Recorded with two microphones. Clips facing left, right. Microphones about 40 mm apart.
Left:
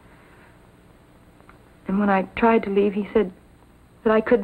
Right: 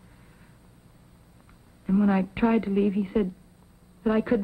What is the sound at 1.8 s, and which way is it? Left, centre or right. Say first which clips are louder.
A woman's voice: left 3 dB; left.